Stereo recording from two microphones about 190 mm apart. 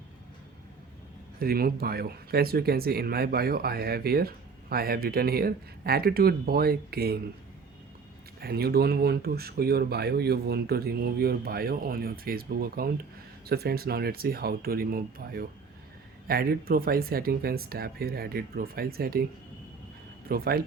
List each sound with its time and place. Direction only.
1.4 s speech: 50° right (ahead or behind)
8.4 s speech: 55° right (ahead or behind)
20.2 s speech: 55° right (ahead or behind)